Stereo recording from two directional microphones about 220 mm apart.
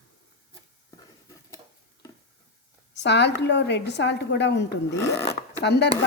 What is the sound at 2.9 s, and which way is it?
A woman's voice, 50° left (ahead or behind).